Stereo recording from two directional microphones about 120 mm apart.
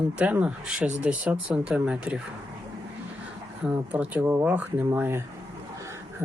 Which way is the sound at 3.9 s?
15° right (ahead or behind).